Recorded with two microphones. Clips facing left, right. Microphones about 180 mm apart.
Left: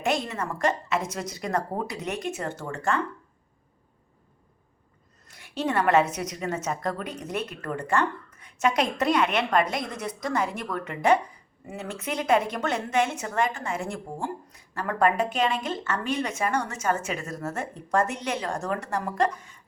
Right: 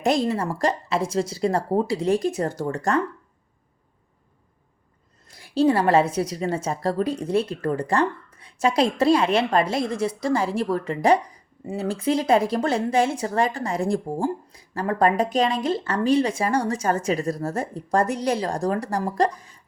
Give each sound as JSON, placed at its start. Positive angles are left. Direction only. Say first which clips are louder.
{"t": 0.0, "sound": "a woman's voice", "louder": "right 6 dB", "side_deg": -35}
{"t": 5.3, "sound": "a woman's voice", "louder": "right 8 dB", "side_deg": -35}